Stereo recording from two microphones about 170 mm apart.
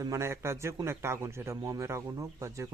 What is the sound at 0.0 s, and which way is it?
Speech, 15° right (ahead or behind).